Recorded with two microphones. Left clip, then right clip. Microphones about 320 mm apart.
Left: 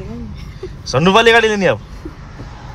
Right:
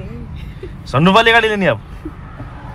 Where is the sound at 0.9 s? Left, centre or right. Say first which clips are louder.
Left 1 dB; centre.